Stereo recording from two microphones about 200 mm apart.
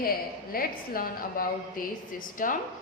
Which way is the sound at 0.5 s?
45° left (ahead or behind).